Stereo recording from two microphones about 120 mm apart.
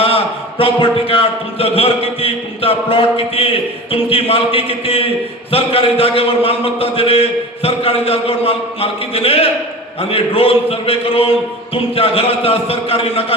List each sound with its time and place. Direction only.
0.6 s a man's voice: 50° left (ahead or behind)